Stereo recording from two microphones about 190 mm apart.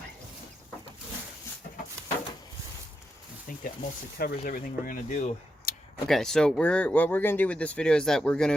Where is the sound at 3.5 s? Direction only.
45° left (ahead or behind).